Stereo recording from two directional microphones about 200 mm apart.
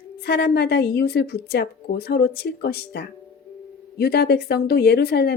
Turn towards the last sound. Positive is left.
turn(degrees=55)  # may be behind; listen again after turning